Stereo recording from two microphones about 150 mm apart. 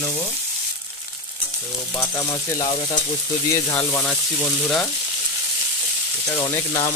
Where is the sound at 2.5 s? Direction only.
30° left (ahead or behind).